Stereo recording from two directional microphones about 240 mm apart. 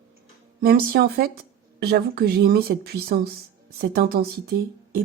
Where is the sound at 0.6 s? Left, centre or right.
Right.